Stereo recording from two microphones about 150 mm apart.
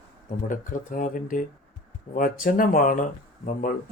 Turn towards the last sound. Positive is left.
turn(degrees=65)  # may be behind; listen again after turning